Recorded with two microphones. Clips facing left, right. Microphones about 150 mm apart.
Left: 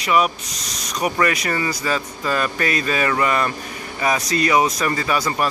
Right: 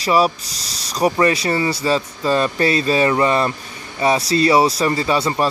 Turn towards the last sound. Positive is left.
turn(degrees=-30)  # may be behind; listen again after turning